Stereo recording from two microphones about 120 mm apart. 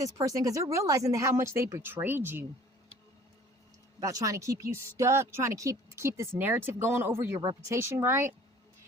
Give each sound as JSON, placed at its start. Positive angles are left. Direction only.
{"t": 0.0, "sound": "speech", "side_deg": -30}
{"t": 4.0, "sound": "speech", "side_deg": -30}